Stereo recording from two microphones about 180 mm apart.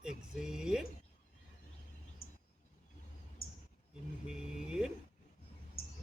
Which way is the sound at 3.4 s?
55° left (ahead or behind).